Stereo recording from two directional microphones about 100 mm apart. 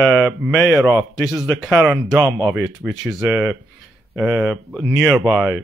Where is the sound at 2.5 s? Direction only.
Centre (ahead or behind).